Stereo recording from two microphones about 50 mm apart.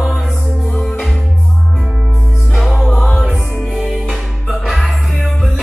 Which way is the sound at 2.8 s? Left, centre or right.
Centre.